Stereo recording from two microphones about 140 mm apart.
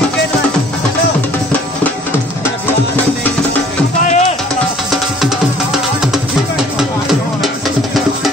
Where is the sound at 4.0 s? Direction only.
55° left (ahead or behind).